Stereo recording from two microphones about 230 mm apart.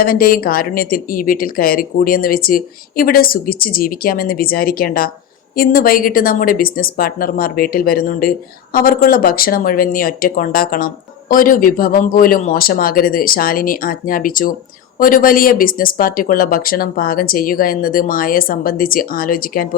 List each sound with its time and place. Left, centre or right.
0.0 s speech: left